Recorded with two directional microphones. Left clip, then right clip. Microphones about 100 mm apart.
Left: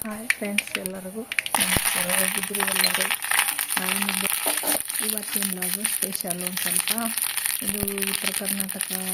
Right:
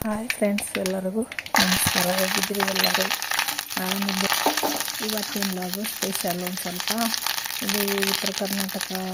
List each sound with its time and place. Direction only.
1.5 s speech: 30° right (ahead or behind)
7.9 s speech: 30° right (ahead or behind)